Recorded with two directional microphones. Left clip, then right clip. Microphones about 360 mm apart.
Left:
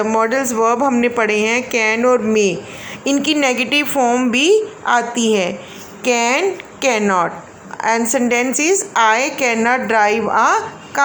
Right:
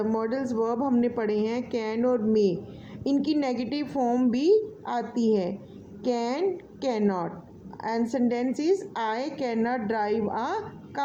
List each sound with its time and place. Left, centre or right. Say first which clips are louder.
0.1 s a woman's voice: left 12 dB; right
7.8 s a woman's voice: left 12 dB; right